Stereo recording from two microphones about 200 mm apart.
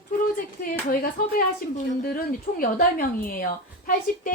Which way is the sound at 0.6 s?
45° left (ahead or behind).